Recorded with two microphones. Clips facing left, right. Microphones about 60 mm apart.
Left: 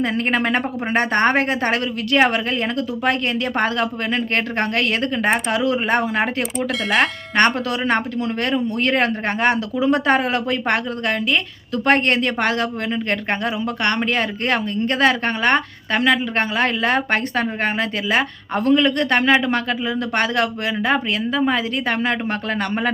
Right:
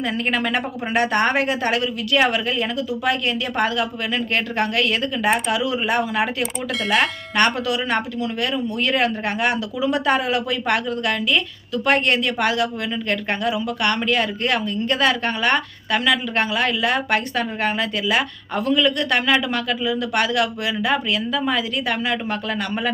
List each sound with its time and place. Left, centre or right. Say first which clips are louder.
0.1 s a man's voice: left 2 dB; left
7.3 s a man's voice: left 2 dB; left